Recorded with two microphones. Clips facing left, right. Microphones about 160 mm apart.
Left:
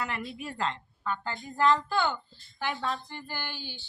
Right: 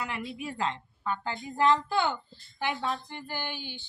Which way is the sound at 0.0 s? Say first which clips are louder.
Even; 10° right (ahead or behind).